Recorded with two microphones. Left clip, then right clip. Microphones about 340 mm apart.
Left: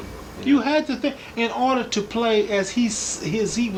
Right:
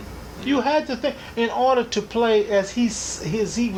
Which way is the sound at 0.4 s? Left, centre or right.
Centre.